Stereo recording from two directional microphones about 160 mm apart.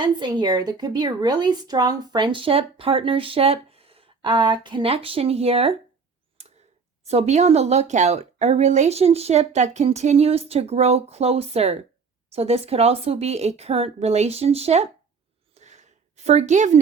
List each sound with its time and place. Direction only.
0.0 s speech: 30° right (ahead or behind)
7.0 s speech: 40° right (ahead or behind)
15.5 s a sound: 45° right (ahead or behind)